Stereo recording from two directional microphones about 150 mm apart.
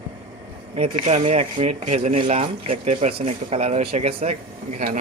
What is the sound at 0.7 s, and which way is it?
Speech, 50° right (ahead or behind).